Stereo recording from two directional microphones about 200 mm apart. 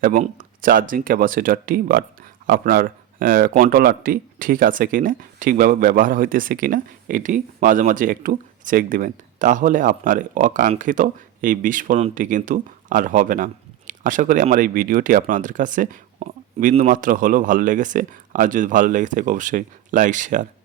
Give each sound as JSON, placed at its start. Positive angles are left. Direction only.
{"t": 0.0, "sound": "speech", "side_deg": -40}